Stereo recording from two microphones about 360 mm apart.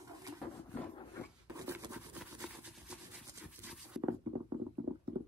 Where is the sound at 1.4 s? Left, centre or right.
Centre.